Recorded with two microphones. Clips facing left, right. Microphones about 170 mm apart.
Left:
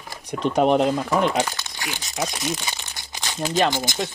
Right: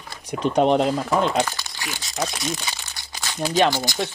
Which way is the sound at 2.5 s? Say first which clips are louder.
Left 1 dB; 20° left (ahead or behind).